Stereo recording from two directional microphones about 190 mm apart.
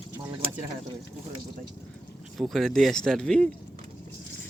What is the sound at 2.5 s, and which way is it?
Speech, centre (ahead or behind).